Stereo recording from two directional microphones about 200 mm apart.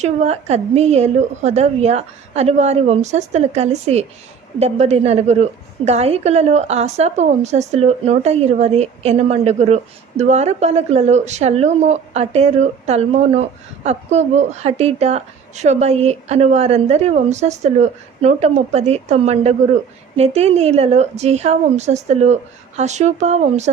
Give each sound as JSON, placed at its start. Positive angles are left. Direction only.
{"t": 0.0, "sound": "a woman's voice", "side_deg": -35}